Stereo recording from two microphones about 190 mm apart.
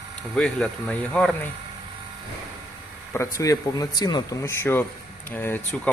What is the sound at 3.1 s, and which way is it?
Speech, 15° left (ahead or behind).